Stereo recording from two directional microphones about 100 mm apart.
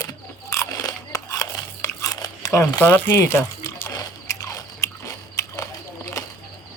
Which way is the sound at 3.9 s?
35° left (ahead or behind).